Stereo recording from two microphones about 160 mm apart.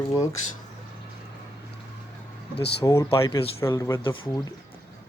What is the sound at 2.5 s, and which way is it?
Speech, 90° left.